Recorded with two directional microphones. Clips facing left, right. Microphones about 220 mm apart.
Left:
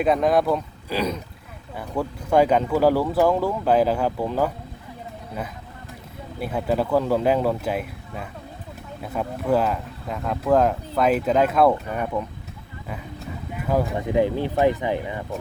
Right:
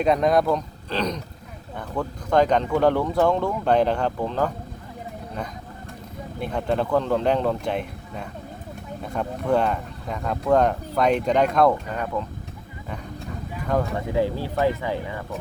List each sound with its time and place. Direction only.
0.0 s speech: centre (ahead or behind)
6.4 s speech: 5° left (ahead or behind)
13.7 s speech: 5° left (ahead or behind)
14.1 s speech: 20° left (ahead or behind)